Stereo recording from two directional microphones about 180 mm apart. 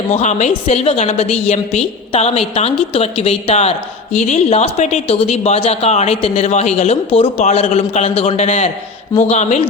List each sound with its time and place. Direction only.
0.1 s a woman's voice: 40° left (ahead or behind)